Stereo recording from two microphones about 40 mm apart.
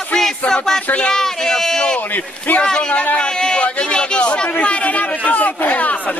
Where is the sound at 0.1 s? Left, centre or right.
Centre.